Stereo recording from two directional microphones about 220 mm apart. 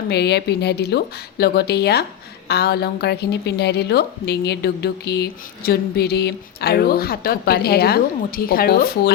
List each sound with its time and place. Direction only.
0.1 s a woman's voice: 50° left (ahead or behind)